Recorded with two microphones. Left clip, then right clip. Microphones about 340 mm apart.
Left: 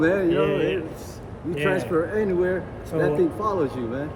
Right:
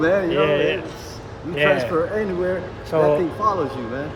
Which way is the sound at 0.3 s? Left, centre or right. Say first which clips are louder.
Right 3 dB; centre.